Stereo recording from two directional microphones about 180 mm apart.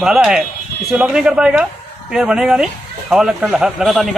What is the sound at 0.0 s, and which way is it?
Speech, 5° right (ahead or behind).